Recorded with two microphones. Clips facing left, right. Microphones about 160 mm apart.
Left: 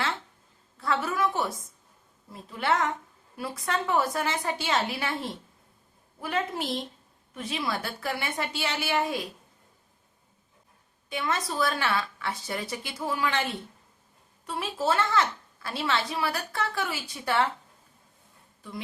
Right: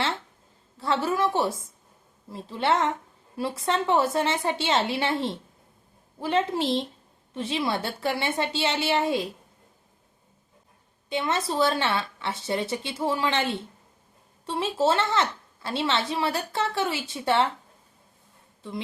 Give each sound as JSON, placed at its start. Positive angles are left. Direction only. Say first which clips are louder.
{"t": 0.8, "sound": "speech", "louder": "right 3 dB", "side_deg": -30}
{"t": 11.1, "sound": "speech", "louder": "right 4 dB", "side_deg": -25}